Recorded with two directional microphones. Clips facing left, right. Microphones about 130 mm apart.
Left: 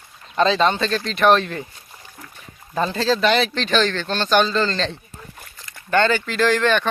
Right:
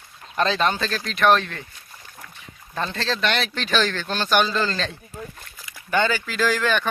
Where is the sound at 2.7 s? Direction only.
5° left (ahead or behind).